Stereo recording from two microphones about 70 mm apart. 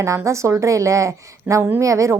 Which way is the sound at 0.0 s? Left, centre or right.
Right.